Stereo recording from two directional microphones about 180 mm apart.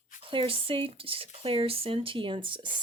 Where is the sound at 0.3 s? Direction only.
30° right (ahead or behind).